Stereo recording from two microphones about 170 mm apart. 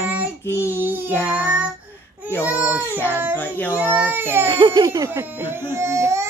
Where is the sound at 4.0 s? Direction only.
10° right (ahead or behind).